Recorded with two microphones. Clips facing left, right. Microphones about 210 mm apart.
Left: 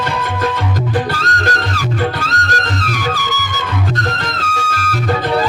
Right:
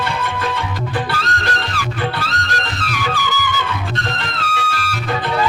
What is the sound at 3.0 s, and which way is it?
Music, 40° left (ahead or behind).